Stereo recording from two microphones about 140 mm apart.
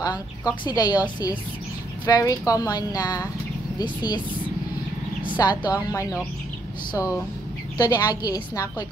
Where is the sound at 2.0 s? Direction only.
25° left (ahead or behind).